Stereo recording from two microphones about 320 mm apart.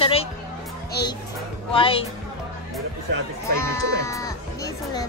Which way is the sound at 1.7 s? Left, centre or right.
Centre.